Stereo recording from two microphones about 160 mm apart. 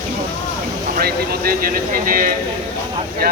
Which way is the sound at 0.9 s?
70° right (ahead or behind).